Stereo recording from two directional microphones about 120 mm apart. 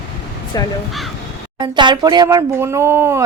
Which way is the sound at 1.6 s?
40° right (ahead or behind).